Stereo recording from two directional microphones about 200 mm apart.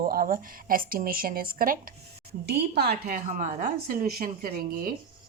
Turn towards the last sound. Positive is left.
turn(degrees=-50)  # may be behind; listen again after turning